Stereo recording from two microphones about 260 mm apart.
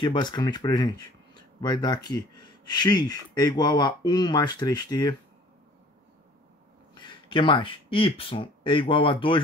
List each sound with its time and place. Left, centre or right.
0.0 s speech: centre
7.0 s speech: centre